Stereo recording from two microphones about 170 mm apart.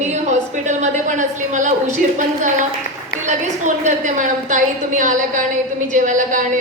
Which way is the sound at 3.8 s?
45° right (ahead or behind).